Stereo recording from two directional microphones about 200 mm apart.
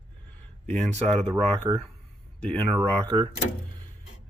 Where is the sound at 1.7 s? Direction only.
20° right (ahead or behind).